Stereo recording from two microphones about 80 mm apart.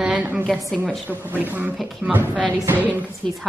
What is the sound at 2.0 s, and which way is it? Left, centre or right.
Speech, centre.